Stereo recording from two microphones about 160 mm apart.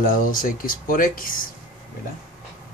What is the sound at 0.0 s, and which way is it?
Speech, 60° left (ahead or behind).